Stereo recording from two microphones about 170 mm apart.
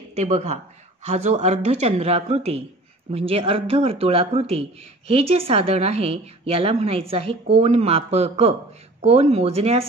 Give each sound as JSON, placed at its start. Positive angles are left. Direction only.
{"t": 0.1, "sound": "speech", "side_deg": -40}